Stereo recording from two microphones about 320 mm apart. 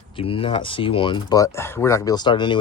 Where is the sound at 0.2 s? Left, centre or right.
Centre.